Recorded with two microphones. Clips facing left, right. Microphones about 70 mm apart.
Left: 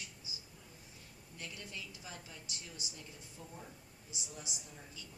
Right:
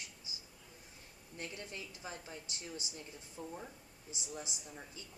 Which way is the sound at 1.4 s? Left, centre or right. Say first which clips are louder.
Right 2 dB; right.